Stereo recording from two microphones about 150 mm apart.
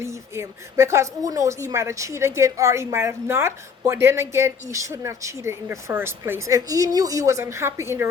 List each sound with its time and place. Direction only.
0.0 s speech: 20° right (ahead or behind)